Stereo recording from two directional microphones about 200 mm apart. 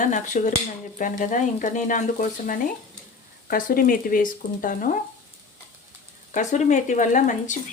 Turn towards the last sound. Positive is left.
turn(degrees=40)  # may be behind; listen again after turning